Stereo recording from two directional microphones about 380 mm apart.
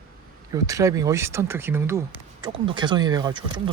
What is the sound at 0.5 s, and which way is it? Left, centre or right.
Speech, centre.